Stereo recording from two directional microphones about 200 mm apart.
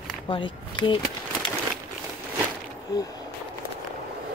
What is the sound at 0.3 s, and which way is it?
Speech, 25° left (ahead or behind).